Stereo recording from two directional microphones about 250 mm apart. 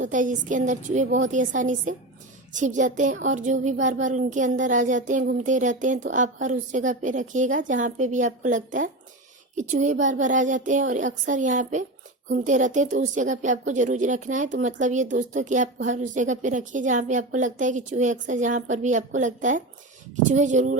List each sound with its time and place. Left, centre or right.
0.0 s a woman's voice: right